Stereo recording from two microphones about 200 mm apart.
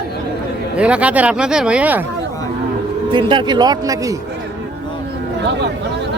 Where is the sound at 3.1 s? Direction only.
25° right (ahead or behind).